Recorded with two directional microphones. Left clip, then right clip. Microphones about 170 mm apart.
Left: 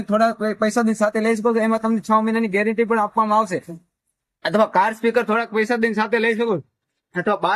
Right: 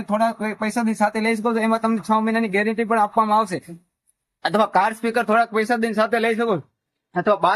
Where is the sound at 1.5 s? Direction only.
15° right (ahead or behind).